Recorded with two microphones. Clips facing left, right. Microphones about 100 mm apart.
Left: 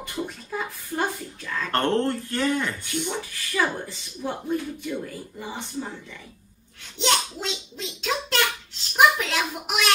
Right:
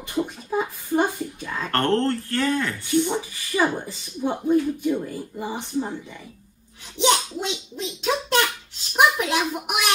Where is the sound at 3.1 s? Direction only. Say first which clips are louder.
Right 4 dB; 15° right (ahead or behind).